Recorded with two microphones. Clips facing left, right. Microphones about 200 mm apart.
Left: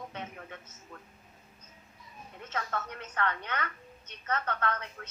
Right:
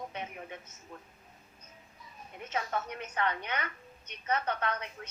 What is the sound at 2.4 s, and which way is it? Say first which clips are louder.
A woman's voice: right 2 dB; 15° right (ahead or behind).